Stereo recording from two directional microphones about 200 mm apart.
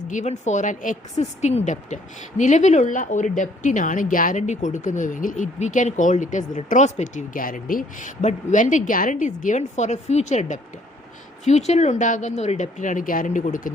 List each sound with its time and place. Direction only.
0.1 s a woman's voice: 35° left (ahead or behind)